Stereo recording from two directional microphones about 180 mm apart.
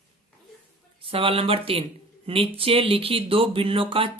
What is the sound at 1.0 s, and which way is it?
Speech, 30° right (ahead or behind).